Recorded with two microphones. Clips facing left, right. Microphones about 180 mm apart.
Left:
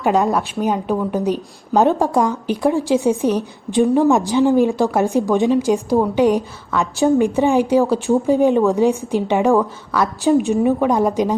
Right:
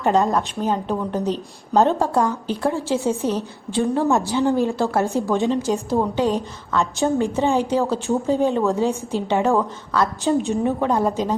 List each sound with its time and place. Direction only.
0.3 s speech: 10° left (ahead or behind)